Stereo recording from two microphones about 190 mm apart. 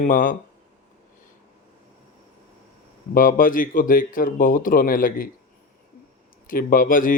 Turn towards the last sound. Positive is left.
turn(degrees=45)  # may be behind; listen again after turning